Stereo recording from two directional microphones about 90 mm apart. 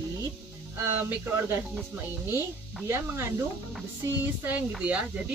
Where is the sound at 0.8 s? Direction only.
25° right (ahead or behind).